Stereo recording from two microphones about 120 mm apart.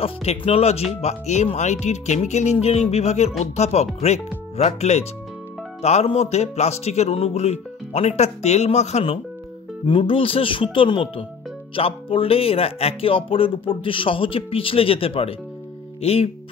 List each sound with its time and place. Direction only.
0.0 s speech: 60° left (ahead or behind)
1.0 s speech: 70° left (ahead or behind)
9.8 s speech: 45° left (ahead or behind)